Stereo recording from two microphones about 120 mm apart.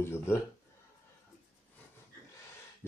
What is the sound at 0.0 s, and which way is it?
Speech, 20° left (ahead or behind).